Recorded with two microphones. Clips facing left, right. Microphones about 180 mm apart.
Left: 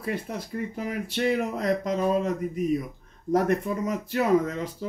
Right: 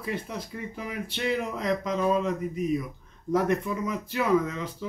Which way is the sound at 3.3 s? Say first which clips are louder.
Left 2 dB; 45° left (ahead or behind).